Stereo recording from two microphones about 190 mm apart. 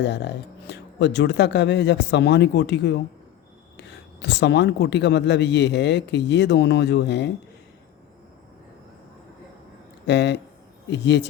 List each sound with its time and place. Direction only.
0.0 s speech: 65° left (ahead or behind)
10.1 s speech: 65° left (ahead or behind)